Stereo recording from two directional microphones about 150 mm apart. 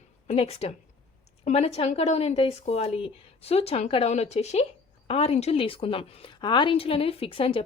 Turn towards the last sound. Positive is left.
turn(degrees=35)  # may be behind; listen again after turning